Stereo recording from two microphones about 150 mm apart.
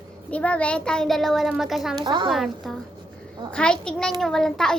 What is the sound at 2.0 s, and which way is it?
Speech, 30° right (ahead or behind).